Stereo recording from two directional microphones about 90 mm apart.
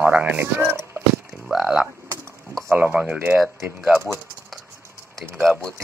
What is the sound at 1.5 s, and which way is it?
Speech, 5° right (ahead or behind).